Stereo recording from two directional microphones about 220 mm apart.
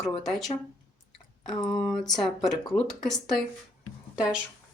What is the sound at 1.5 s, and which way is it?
Speech, 20° left (ahead or behind).